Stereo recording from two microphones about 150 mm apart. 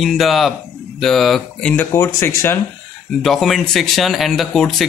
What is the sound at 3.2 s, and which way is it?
A man's voice, centre (ahead or behind).